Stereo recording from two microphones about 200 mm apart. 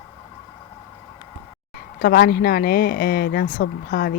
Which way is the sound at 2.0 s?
50° left (ahead or behind).